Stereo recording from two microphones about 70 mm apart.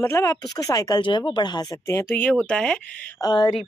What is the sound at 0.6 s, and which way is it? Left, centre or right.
Speech, left.